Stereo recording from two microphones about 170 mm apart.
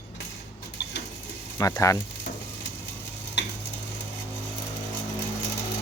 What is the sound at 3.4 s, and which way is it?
Tick-tock, 90° left.